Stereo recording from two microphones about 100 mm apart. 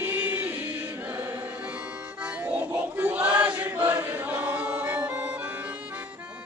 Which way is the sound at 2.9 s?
15° right (ahead or behind).